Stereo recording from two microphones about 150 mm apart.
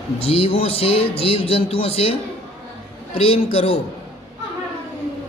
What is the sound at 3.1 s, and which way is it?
Speech, 40° left (ahead or behind).